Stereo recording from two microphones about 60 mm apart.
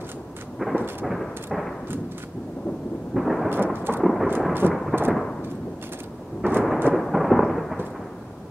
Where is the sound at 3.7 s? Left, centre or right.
Right.